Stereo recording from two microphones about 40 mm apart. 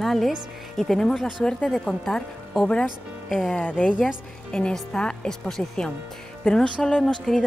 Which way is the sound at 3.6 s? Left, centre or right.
Left.